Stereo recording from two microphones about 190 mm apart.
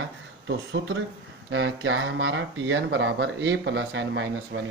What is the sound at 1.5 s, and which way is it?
Speech, 85° right.